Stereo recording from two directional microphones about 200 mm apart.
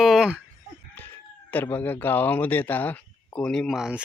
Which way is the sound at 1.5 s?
10° left (ahead or behind).